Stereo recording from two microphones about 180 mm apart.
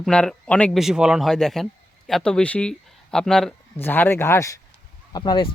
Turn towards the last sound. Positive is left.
turn(degrees=25)  # may be behind; listen again after turning